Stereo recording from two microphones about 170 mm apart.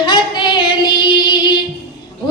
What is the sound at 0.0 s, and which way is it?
Child singing, 30° left (ahead or behind).